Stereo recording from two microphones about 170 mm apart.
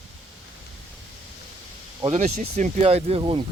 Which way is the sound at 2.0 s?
40° right (ahead or behind).